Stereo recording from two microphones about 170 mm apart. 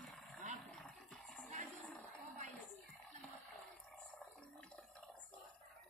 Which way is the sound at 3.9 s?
5° left (ahead or behind).